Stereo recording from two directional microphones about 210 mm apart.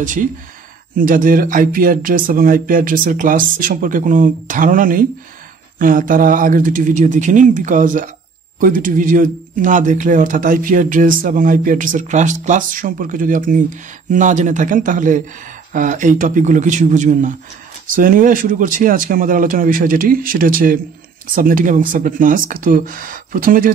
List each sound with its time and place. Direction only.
0.0 s speech: 40° right (ahead or behind)